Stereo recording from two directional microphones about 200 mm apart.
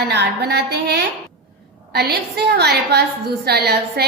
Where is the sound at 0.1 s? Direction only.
55° right (ahead or behind).